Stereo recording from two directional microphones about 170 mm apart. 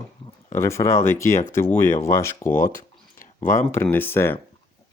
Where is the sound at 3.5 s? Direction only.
15° left (ahead or behind).